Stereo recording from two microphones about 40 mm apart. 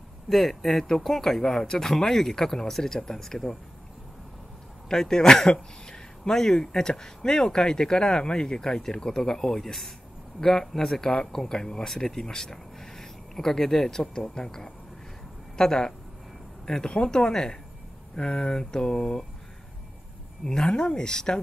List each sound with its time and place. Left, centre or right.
0.3 s speech: centre
4.8 s speech: centre
20.4 s speech: centre